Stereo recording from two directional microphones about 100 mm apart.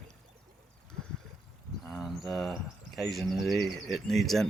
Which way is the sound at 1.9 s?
Centre (ahead or behind).